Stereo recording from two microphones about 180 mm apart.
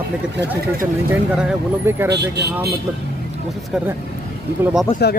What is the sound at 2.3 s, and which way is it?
Speech, 65° right (ahead or behind).